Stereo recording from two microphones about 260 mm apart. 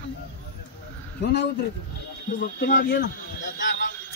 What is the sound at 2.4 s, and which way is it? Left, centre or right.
Speech, left.